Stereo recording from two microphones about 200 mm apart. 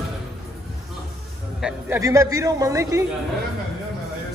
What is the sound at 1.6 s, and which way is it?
A man's voice, 15° right (ahead or behind).